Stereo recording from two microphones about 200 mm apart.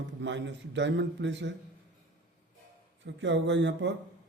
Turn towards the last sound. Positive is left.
turn(degrees=-60)  # may be behind; listen again after turning